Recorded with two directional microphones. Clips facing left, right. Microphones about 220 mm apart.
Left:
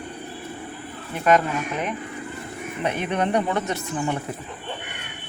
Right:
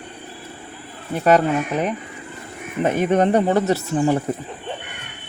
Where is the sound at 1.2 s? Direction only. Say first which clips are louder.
Right 4 dB; 35° right (ahead or behind).